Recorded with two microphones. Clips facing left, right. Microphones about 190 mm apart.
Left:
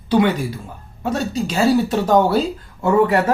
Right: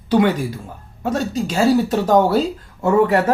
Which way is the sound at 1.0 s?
45° right (ahead or behind).